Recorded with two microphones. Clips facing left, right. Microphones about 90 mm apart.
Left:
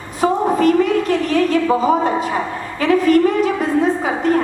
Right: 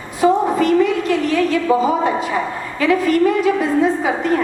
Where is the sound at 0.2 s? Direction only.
40° left (ahead or behind).